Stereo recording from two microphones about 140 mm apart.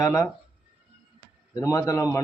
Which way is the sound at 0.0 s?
25° left (ahead or behind).